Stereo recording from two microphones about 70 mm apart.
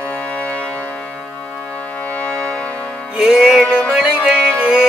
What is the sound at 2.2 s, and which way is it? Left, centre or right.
Brass instrument, centre.